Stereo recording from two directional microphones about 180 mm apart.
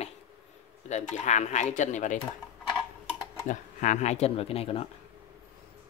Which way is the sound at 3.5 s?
45° left (ahead or behind).